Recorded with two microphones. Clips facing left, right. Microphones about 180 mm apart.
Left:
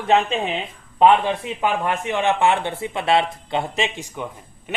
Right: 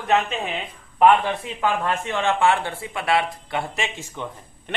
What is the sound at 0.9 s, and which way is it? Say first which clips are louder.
A man's voice: left 1 dB; 20° left (ahead or behind).